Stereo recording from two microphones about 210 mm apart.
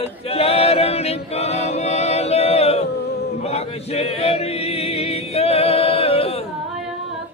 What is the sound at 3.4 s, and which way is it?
Chant, 30° left (ahead or behind).